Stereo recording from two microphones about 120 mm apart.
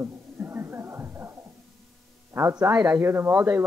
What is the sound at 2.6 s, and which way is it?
Speech, 20° right (ahead or behind).